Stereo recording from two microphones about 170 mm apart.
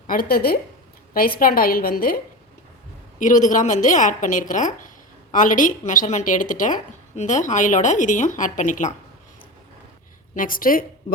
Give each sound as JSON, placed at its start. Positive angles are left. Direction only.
{"t": 0.1, "sound": "a woman's voice", "side_deg": 60}
{"t": 10.3, "sound": "a woman's voice", "side_deg": 55}